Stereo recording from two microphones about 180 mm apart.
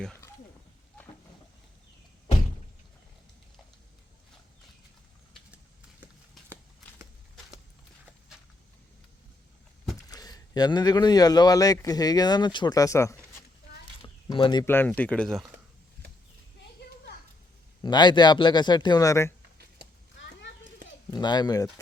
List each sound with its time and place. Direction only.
10.1 s speech: 20° left (ahead or behind)
14.0 s a sound: 30° left (ahead or behind)
14.6 s speech: 10° left (ahead or behind)
17.8 s speech: 25° left (ahead or behind)
21.1 s speech: 25° left (ahead or behind)